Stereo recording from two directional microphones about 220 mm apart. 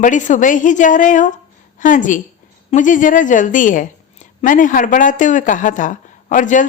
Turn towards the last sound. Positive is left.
turn(degrees=35)  # may be behind; listen again after turning